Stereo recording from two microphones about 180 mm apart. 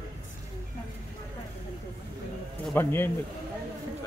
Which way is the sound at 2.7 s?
10° left (ahead or behind).